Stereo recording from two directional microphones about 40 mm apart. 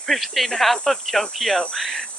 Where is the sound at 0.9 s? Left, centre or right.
Centre.